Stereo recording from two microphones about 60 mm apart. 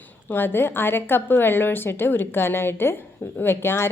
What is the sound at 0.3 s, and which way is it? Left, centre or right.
Speech, left.